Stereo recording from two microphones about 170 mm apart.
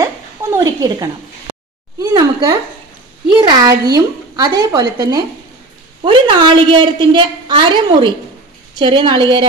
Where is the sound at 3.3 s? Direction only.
25° right (ahead or behind).